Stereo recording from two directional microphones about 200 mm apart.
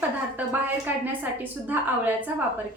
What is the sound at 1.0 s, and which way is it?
A woman's voice, 10° right (ahead or behind).